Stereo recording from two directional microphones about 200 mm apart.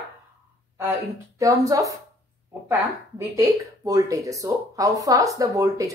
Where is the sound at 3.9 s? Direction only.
15° right (ahead or behind).